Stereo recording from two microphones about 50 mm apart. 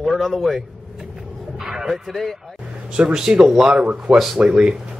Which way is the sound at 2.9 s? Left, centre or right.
Centre.